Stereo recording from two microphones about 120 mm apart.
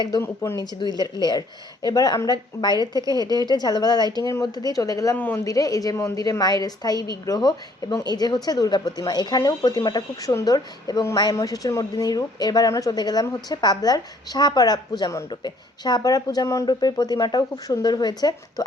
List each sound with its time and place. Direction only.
0.2 s speech: 20° left (ahead or behind)
0.6 s a woman's voice: 35° left (ahead or behind)
5.1 s speech: 15° left (ahead or behind)
5.4 s a woman's voice: 30° left (ahead or behind)